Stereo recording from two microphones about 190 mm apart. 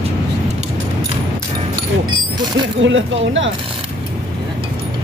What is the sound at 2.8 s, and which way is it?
Speech, 80° right.